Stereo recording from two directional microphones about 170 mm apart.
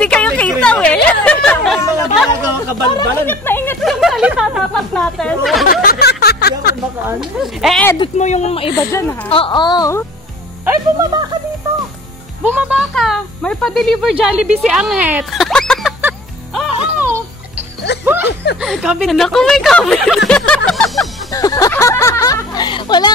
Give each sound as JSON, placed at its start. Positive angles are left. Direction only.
{"t": 0.0, "sound": "a sound", "side_deg": 5}
{"t": 1.2, "sound": "chatter", "side_deg": 5}
{"t": 2.6, "sound": "speech", "side_deg": 15}
{"t": 3.8, "sound": "speech", "side_deg": 0}
{"t": 5.7, "sound": "a sound", "side_deg": 65}
{"t": 7.2, "sound": "speech", "side_deg": 0}
{"t": 8.2, "sound": "speech", "side_deg": 40}
{"t": 10.6, "sound": "speech", "side_deg": -15}
{"t": 12.4, "sound": "speech", "side_deg": -10}
{"t": 12.9, "sound": "speech", "side_deg": 0}
{"t": 16.0, "sound": "music", "side_deg": -5}
{"t": 18.0, "sound": "speech", "side_deg": -10}
{"t": 21.3, "sound": "speech", "side_deg": 20}